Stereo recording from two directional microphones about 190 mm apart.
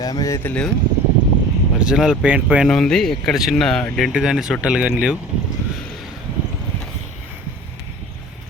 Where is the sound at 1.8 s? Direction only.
5° right (ahead or behind).